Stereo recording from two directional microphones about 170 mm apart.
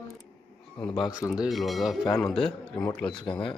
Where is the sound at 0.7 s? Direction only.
Centre (ahead or behind).